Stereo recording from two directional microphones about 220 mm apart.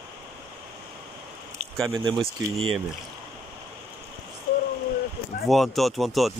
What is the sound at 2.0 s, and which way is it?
Speech, 25° right (ahead or behind).